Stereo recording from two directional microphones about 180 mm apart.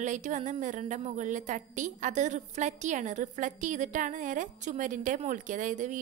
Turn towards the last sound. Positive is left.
turn(degrees=-45)  # may be behind; listen again after turning